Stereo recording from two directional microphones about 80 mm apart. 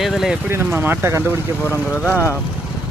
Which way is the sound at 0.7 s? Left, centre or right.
Right.